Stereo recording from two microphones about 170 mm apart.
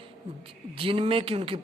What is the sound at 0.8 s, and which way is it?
Speech, 35° right (ahead or behind).